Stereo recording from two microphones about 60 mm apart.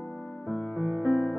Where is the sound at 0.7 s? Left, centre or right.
Right.